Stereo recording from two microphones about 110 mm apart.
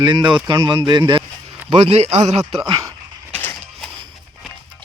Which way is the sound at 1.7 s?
85° right.